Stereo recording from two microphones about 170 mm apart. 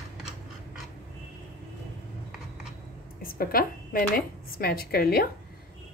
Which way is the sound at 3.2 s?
60° left (ahead or behind).